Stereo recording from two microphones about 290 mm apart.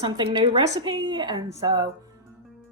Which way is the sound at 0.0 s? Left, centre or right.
Centre.